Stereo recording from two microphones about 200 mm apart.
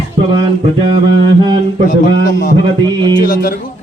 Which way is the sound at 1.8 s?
40° left (ahead or behind).